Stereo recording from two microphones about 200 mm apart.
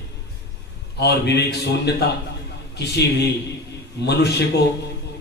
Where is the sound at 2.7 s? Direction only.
55° left (ahead or behind).